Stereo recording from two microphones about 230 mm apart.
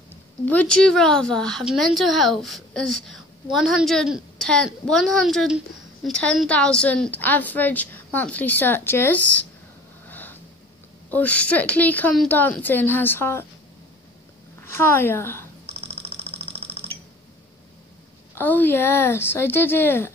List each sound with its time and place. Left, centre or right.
0.5 s a woman's voice: centre
10.0 s a sound: centre
11.1 s a woman's voice: centre
14.6 s a woman's voice: centre
15.6 s a sound: right
18.3 s a woman's voice: centre